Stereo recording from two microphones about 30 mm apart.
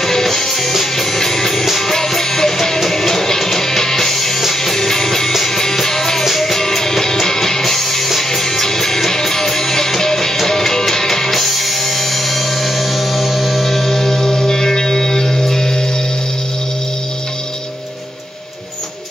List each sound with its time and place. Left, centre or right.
0.0 s music: centre
6.5 s music: centre
14.2 s music: centre